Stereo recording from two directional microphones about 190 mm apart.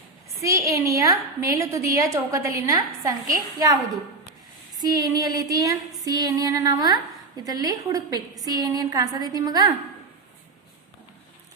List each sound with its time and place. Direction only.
0.4 s a woman's voice: 15° right (ahead or behind)
4.8 s a woman's voice: 20° right (ahead or behind)